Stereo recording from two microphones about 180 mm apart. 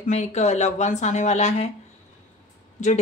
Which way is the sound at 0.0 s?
40° left (ahead or behind).